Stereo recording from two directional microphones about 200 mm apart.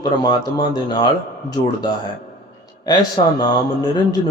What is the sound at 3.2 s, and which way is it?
Speech, 25° left (ahead or behind).